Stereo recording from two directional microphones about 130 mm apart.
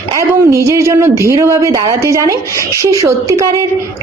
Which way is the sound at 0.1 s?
25° right (ahead or behind).